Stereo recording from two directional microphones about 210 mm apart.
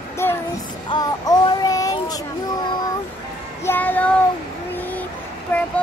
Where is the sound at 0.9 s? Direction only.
20° left (ahead or behind).